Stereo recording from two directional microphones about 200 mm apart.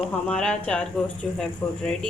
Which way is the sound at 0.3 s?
5° left (ahead or behind).